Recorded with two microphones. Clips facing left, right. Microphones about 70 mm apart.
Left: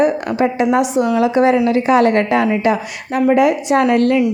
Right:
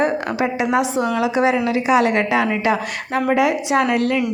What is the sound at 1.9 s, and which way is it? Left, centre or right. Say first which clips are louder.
Speech: left 3 dB; left.